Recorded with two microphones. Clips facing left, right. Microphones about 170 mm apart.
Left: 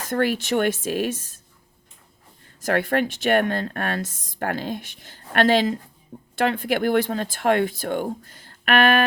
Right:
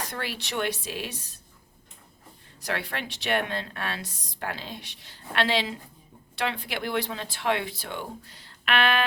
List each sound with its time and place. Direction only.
0.0 s speech: 50° left (ahead or behind)
2.6 s speech: 50° left (ahead or behind)